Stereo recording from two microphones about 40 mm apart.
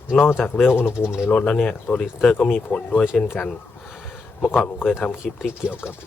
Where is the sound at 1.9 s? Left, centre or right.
Left.